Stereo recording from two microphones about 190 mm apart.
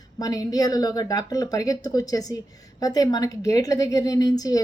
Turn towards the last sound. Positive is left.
turn(degrees=20)  # may be behind; listen again after turning